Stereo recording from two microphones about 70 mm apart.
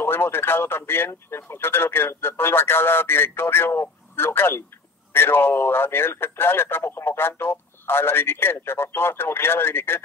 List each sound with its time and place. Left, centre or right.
0.0 s speech: left